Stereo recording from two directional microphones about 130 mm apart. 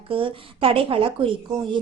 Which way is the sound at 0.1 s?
40° right (ahead or behind).